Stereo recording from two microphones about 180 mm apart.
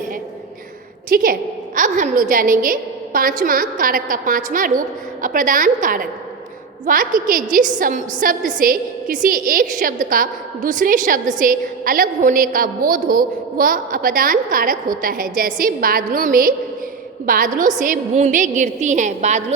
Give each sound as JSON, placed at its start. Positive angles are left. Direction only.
{"t": 1.1, "sound": "a woman's voice", "side_deg": -55}